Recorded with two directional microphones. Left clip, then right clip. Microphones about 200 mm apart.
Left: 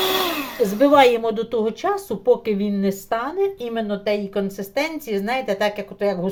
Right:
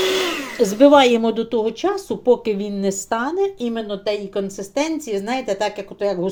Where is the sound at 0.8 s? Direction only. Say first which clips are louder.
Right 2 dB; 30° right (ahead or behind).